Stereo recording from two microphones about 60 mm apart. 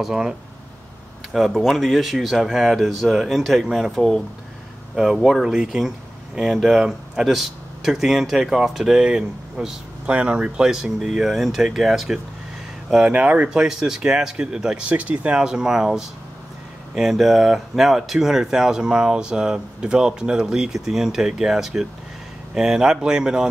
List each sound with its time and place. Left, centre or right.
0.0 s speech: centre
10.0 s speech: right
10.7 s speech: centre
13.1 s speech: right